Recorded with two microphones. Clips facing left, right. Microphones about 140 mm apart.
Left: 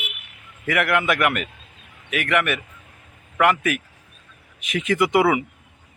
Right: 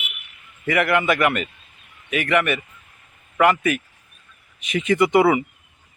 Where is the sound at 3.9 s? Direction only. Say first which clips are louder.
Left 4 dB; 90° left.